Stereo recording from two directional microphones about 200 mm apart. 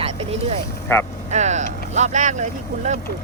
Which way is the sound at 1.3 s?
35° right (ahead or behind).